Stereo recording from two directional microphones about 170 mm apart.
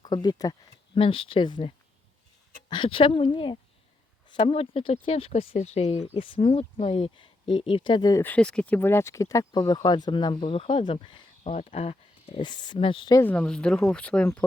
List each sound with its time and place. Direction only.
0.0 s speech: 25° left (ahead or behind)
8.2 s speech: 10° left (ahead or behind); by 13.1 s 30° left (ahead or behind)
13.1 s speech: 10° left (ahead or behind)